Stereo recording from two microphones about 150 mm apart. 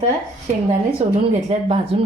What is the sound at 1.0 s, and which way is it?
Speech, 55° right (ahead or behind).